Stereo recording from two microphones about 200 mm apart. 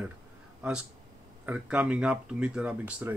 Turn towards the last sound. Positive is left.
turn(degrees=-5)  # may be behind; listen again after turning